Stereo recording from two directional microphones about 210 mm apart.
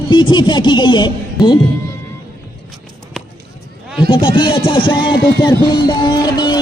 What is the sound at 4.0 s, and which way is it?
A man's voice, 25° left (ahead or behind).